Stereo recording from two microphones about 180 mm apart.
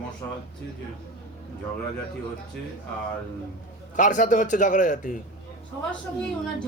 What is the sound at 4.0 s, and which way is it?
Speech, 45° left (ahead or behind).